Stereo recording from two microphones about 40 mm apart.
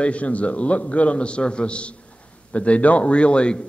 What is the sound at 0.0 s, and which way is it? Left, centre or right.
A man's voice, left.